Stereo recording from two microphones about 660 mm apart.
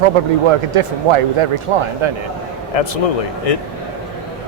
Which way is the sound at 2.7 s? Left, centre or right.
Left.